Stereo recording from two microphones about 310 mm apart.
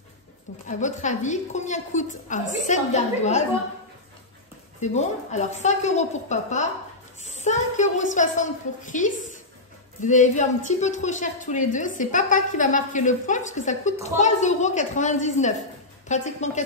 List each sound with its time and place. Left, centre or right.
0.7 s a woman's voice: left
4.7 s a woman's voice: left